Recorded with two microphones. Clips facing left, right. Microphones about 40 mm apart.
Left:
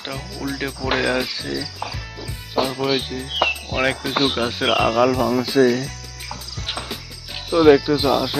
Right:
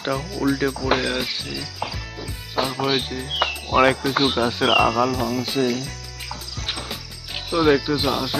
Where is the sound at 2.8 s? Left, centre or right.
Centre.